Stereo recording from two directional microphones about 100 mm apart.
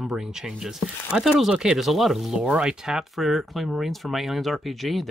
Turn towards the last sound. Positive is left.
turn(degrees=0)  # may be behind; listen again after turning